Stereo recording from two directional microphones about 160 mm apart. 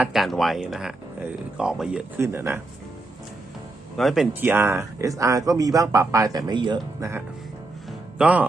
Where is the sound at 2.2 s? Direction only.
15° right (ahead or behind).